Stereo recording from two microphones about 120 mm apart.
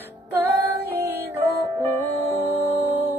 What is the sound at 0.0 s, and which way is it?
Music, 15° right (ahead or behind).